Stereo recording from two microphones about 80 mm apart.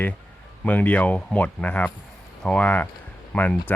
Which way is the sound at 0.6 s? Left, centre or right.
Centre.